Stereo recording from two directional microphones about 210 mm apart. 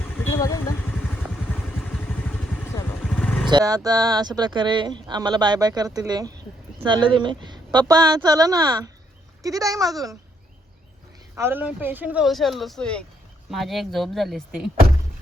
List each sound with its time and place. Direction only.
0.3 s speech: 15° left (ahead or behind)
3.2 s vehicle: 5° left (ahead or behind)
3.5 s speech: 15° right (ahead or behind)
11.3 s speech: 10° right (ahead or behind)